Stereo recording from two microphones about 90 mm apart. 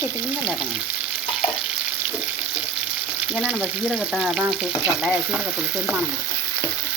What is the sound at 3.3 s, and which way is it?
Frying, 10° right (ahead or behind).